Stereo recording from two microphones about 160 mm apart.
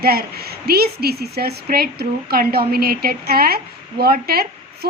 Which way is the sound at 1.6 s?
75° right (ahead or behind).